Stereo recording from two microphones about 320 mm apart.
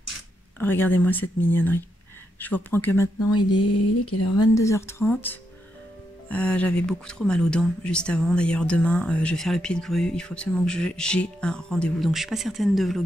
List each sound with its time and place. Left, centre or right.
0.6 s speech: centre
3.2 s speech: left
4.6 s speech: centre